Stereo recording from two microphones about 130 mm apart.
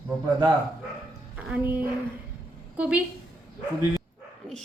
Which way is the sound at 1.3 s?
10° right (ahead or behind).